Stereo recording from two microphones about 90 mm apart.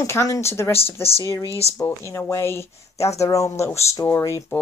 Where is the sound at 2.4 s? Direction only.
30° left (ahead or behind).